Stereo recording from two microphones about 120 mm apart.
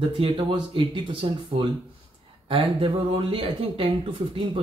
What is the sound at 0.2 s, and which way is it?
Speech, 45° right (ahead or behind).